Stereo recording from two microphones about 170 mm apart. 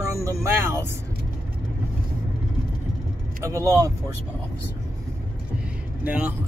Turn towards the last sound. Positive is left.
turn(degrees=-10)  # may be behind; listen again after turning